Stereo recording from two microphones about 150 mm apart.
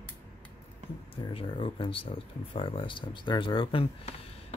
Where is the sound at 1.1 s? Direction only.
35° left (ahead or behind).